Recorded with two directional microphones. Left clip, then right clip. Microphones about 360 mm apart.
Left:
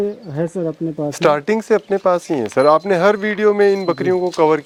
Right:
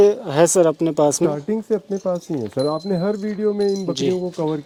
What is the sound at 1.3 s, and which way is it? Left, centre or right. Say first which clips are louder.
Speech: left 7 dB; centre.